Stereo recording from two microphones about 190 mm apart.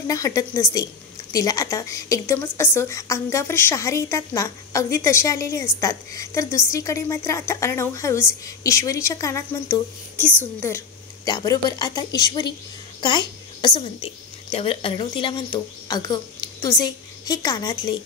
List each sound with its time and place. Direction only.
0.0 s a woman's voice: 15° left (ahead or behind)
11.2 s a woman's voice: 20° left (ahead or behind)